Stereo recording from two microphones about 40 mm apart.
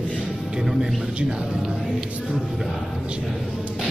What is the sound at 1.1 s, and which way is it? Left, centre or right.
Speech, right.